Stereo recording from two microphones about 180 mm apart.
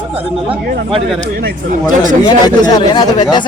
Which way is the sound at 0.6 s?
60° right (ahead or behind).